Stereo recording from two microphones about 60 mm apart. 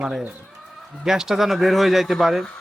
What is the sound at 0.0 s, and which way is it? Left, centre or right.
Speech, centre.